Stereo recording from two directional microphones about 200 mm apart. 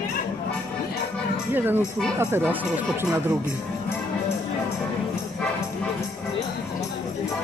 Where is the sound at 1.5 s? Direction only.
10° right (ahead or behind).